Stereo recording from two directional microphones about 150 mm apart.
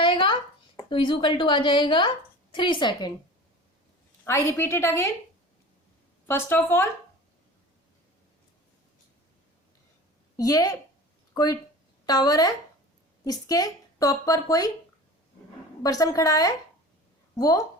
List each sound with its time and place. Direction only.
0.0 s a sound: 35° left (ahead or behind)
0.9 s a woman's voice: 35° left (ahead or behind)
4.2 s a woman's voice: 15° left (ahead or behind)
6.2 s a woman's voice: 15° left (ahead or behind)
10.3 s a woman's voice: 25° left (ahead or behind)
15.8 s speech: 25° left (ahead or behind)